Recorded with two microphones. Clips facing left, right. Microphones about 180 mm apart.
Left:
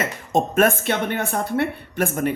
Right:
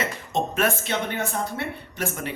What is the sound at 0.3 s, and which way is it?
Speech, 50° left (ahead or behind).